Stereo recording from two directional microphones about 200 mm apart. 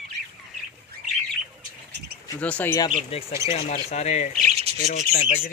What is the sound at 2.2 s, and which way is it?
Speech, 5° left (ahead or behind).